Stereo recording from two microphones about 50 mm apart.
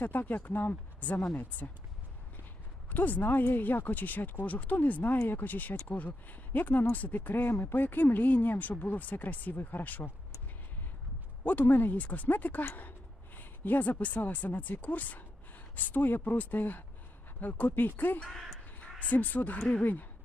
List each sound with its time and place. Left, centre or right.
0.0 s speech: left
2.9 s speech: left
7.5 s speech: left
11.4 s speech: left
18.3 s speech: centre
18.8 s speech: left